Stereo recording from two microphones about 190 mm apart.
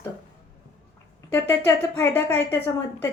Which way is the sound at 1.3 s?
10° left (ahead or behind).